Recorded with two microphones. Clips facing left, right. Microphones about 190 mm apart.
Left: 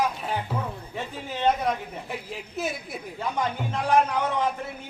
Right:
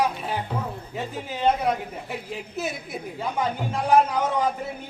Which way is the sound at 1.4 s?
5° right (ahead or behind).